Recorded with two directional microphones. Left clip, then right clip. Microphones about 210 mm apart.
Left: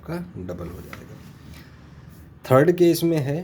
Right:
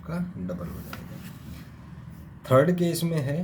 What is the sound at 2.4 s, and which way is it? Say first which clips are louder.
Speech: left 5 dB; 40° left (ahead or behind).